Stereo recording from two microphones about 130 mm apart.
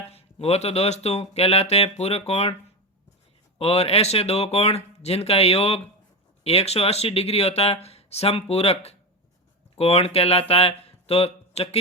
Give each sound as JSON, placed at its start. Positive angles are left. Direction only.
{"t": 0.1, "sound": "speech", "side_deg": 50}
{"t": 3.6, "sound": "speech", "side_deg": 50}